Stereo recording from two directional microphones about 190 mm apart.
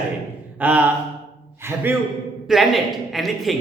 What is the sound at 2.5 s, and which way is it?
A man's voice, centre (ahead or behind).